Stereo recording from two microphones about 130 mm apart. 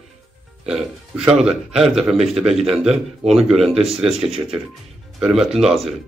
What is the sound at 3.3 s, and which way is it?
Speech, 5° right (ahead or behind).